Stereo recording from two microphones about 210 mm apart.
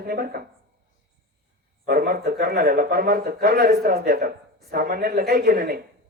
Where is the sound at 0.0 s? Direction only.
45° right (ahead or behind).